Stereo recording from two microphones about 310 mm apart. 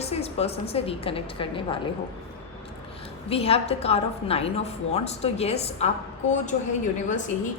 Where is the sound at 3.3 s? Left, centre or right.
Centre.